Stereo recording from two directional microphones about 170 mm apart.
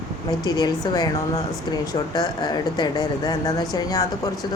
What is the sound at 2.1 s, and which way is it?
Speech, 25° left (ahead or behind).